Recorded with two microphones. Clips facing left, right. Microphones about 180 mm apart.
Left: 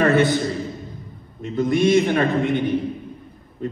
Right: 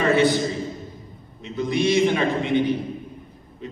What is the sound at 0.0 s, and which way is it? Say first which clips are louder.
Speech: left 2 dB; 50° left (ahead or behind).